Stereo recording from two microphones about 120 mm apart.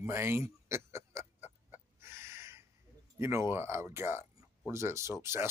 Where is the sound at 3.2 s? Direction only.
20° right (ahead or behind).